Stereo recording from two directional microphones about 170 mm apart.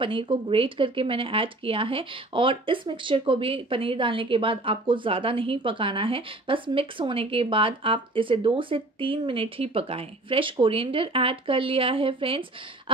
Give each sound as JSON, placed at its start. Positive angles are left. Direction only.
{"t": 0.0, "sound": "speech", "side_deg": -30}